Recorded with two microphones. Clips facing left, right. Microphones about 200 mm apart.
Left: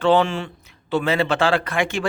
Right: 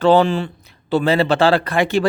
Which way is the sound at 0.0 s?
40° right (ahead or behind).